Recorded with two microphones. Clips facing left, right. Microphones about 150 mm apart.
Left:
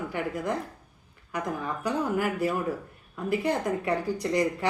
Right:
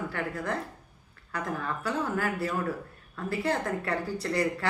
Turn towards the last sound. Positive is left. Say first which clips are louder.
# left 3 dB
turn(degrees=15)  # may be behind; listen again after turning